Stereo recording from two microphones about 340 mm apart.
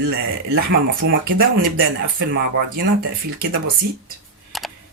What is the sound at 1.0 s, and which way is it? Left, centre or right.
Speech, right.